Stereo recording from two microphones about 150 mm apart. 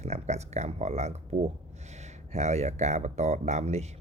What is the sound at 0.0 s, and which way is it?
Speech, 45° right (ahead or behind).